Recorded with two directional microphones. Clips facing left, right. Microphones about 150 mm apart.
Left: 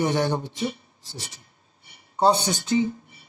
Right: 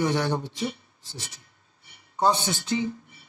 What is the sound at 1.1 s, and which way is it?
Speech, 35° left (ahead or behind).